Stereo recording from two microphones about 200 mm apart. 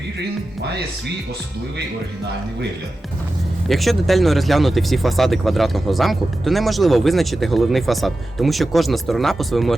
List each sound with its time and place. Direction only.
0.2 s speech: 55° right (ahead or behind)
3.7 s speech: centre (ahead or behind)